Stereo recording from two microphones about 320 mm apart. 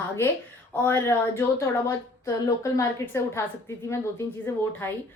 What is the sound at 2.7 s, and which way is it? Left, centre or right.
Speech, centre.